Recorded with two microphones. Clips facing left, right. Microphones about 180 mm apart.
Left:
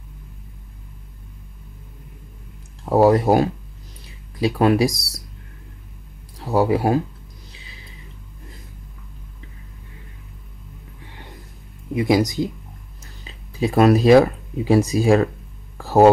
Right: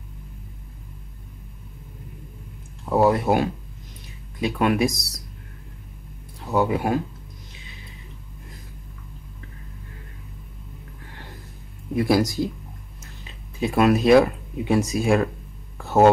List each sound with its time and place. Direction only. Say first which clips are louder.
2.8 s speech: left 4 dB; 35° left (ahead or behind)
6.4 s speech: left 4 dB; 35° left (ahead or behind)
11.9 s speech: left 2 dB; 20° left (ahead or behind)
13.6 s speech: left 4 dB; 35° left (ahead or behind)
15.8 s a sound: left 3 dB; 35° left (ahead or behind)